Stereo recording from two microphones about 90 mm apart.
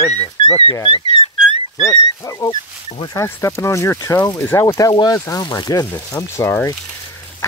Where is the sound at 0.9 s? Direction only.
75° left (ahead or behind).